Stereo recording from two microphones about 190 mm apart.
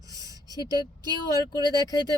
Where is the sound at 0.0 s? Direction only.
20° right (ahead or behind).